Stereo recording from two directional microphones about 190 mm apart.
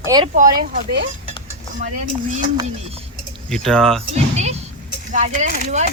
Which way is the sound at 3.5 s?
5° left (ahead or behind).